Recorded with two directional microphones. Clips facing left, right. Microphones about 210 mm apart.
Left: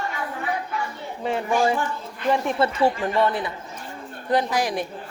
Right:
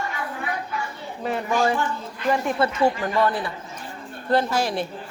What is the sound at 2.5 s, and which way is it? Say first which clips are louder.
A man's voice: even; 30° left (ahead or behind).